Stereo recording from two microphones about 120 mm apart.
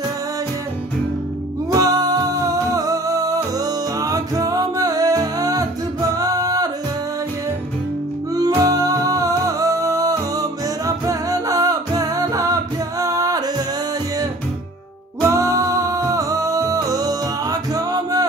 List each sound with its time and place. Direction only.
1.7 s music: 30° right (ahead or behind)
8.4 s music: 30° right (ahead or behind)
15.2 s music: 25° right (ahead or behind)